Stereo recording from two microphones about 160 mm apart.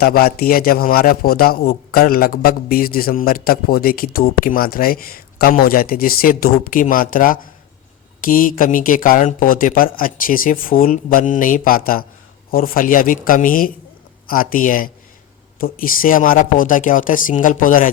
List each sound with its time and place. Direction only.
0.0 s a man's voice: 70° left (ahead or behind)